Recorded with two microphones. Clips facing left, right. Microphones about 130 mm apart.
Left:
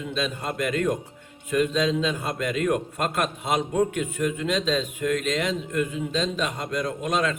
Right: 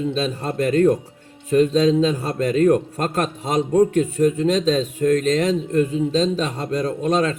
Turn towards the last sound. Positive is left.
turn(degrees=-35)  # may be behind; listen again after turning